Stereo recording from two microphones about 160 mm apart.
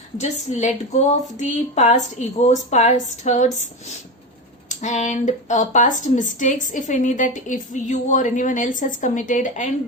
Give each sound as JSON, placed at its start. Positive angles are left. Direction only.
{"t": 0.2, "sound": "speech", "side_deg": 45}